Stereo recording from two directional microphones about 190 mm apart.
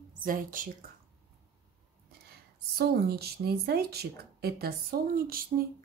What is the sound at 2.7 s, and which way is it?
Speech, 55° right (ahead or behind).